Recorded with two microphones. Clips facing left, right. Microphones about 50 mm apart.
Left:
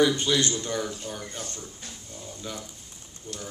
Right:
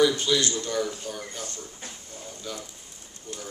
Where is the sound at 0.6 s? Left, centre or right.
Centre.